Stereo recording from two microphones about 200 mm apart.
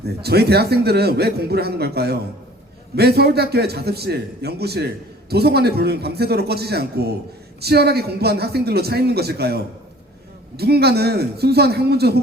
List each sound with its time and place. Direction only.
0.0 s a man's voice: 50° right (ahead or behind)
10.6 s a man's voice: 55° right (ahead or behind)